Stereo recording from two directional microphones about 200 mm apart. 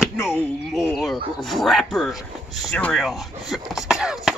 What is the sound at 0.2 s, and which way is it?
Chop, 10° left (ahead or behind).